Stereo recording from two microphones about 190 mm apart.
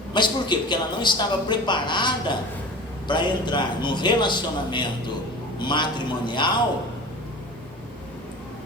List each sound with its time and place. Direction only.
0.1 s speech: 25° left (ahead or behind)